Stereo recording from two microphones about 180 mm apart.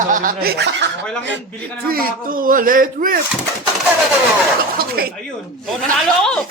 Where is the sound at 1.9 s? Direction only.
55° right (ahead or behind).